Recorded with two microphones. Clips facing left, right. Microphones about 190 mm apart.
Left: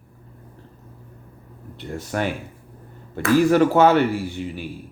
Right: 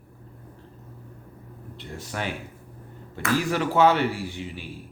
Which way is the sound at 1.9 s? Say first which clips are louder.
Left 7 dB; 50° left (ahead or behind).